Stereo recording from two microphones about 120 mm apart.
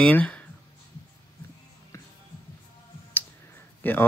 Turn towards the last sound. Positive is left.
turn(degrees=15)  # may be behind; listen again after turning